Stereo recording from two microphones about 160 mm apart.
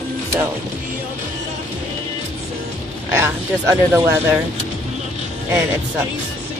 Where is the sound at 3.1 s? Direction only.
20° right (ahead or behind).